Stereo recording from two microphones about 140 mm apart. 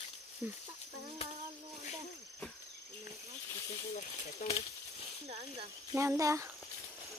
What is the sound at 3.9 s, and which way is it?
Speech, 50° left (ahead or behind).